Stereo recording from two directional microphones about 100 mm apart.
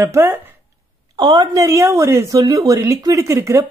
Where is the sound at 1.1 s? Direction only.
40° right (ahead or behind).